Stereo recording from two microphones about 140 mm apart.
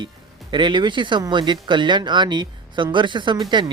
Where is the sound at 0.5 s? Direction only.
35° right (ahead or behind).